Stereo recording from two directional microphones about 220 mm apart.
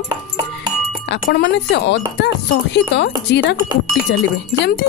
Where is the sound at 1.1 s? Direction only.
50° left (ahead or behind).